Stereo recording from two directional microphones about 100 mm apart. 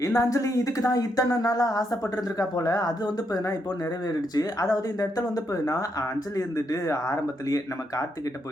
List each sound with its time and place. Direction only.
0.0 s speech: 30° left (ahead or behind)